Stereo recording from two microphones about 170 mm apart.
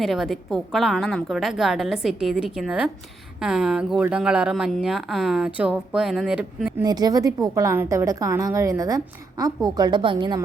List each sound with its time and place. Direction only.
0.0 s speech: centre (ahead or behind)
6.8 s a woman's voice: 25° right (ahead or behind)